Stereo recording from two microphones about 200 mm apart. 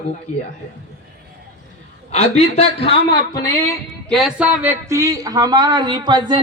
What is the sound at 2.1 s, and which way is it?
Speech, 30° left (ahead or behind).